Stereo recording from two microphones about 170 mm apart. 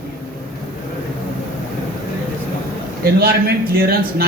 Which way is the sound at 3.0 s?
65° right (ahead or behind).